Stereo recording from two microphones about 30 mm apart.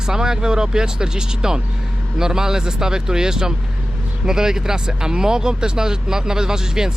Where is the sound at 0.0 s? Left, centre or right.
Right.